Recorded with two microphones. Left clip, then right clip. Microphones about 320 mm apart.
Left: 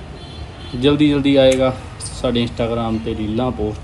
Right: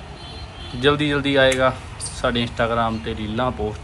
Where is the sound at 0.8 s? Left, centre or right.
Centre.